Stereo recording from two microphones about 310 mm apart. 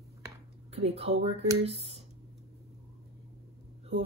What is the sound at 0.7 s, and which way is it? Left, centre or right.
Speech, centre.